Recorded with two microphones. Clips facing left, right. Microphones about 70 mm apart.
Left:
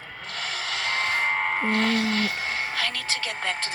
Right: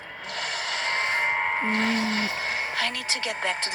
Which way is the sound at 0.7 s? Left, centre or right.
Right.